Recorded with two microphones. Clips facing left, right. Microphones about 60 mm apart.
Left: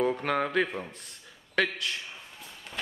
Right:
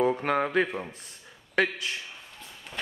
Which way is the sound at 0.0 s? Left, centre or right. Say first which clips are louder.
Right 2 dB; centre.